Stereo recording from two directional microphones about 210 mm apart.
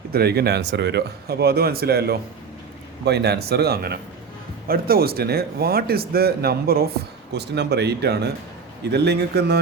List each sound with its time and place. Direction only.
0.1 s a man's voice: 50° right (ahead or behind)